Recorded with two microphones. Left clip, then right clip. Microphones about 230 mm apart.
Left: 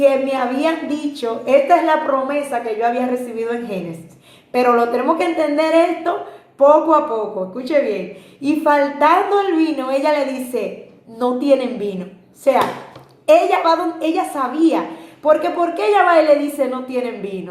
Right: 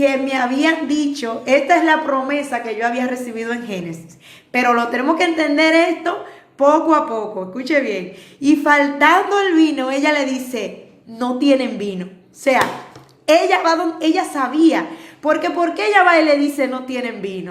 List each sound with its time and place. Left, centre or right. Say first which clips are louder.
0.0 s a woman's voice: left 2 dB; right
7.6 s a woman's voice: left 1 dB; right